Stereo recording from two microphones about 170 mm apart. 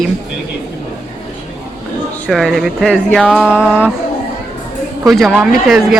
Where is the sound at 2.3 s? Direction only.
Centre (ahead or behind).